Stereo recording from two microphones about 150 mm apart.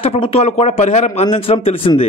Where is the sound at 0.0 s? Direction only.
40° left (ahead or behind).